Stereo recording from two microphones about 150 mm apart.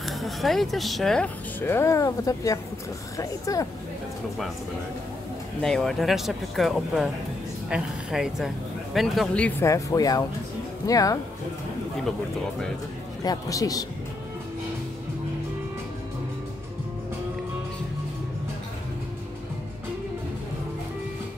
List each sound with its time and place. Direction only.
0.0 s speech: centre (ahead or behind); by 3.6 s 20° left (ahead or behind)
5.6 s speech: 5° left (ahead or behind)
9.7 s speech: 20° left (ahead or behind)
13.2 s speech: 25° left (ahead or behind)